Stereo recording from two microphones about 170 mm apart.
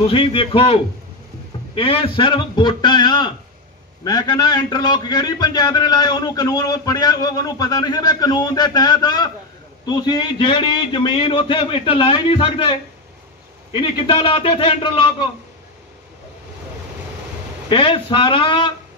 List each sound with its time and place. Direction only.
0.0 s a man's voice: 30° left (ahead or behind)
17.6 s a man's voice: 30° left (ahead or behind)